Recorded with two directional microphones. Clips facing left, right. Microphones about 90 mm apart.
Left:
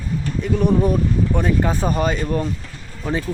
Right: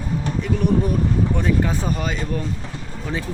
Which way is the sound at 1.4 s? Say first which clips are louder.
Left 2 dB; 40° left (ahead or behind).